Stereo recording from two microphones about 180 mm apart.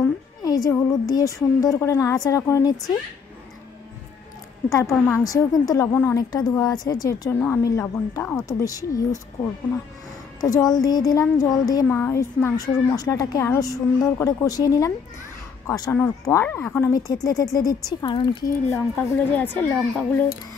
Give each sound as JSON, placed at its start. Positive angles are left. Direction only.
{"t": 0.0, "sound": "a woman's voice", "side_deg": 20}
{"t": 4.6, "sound": "a woman's voice", "side_deg": 15}
{"t": 10.4, "sound": "speech", "side_deg": 20}
{"t": 18.7, "sound": "a woman's voice", "side_deg": 10}